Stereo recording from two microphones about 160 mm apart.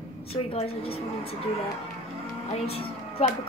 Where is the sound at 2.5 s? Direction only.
40° left (ahead or behind).